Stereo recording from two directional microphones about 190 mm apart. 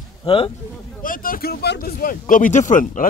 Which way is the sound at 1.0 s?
50° left (ahead or behind).